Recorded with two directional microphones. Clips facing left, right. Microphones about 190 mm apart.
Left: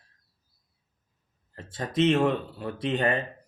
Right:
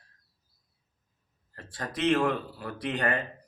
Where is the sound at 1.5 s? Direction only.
20° left (ahead or behind).